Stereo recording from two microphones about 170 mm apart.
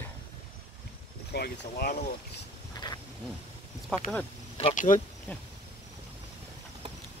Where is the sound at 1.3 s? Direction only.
70° left (ahead or behind).